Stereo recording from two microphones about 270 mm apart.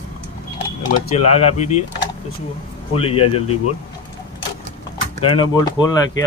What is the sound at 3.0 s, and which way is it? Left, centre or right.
Speech, left.